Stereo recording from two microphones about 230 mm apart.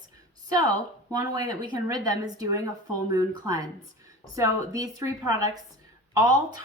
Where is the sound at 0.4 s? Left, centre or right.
Centre.